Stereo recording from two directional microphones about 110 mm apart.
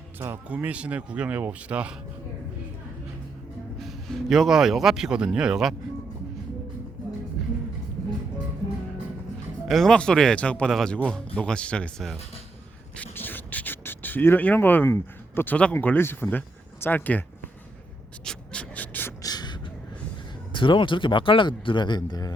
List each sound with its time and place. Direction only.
0.2 s speech: 20° right (ahead or behind)
3.8 s speech: centre (ahead or behind)
9.6 s a man's voice: centre (ahead or behind)
13.0 s a man's voice: 15° left (ahead or behind)
18.3 s a sound: 10° left (ahead or behind)
19.2 s beatboxing: 35° left (ahead or behind)
20.5 s speech: 50° left (ahead or behind)